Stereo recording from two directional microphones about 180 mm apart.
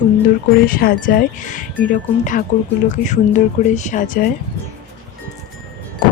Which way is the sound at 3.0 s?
45° left (ahead or behind).